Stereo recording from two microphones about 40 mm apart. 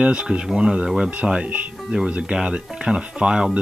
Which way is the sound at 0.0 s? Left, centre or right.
Right.